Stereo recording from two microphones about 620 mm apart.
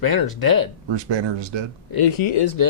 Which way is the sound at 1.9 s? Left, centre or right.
Left.